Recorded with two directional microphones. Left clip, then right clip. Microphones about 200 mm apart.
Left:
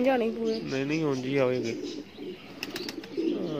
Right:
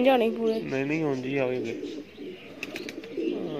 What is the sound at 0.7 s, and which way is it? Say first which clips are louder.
Speech: right 1 dB; centre (ahead or behind).